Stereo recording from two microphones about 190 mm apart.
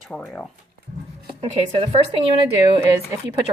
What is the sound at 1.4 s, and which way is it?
Speech, 30° right (ahead or behind).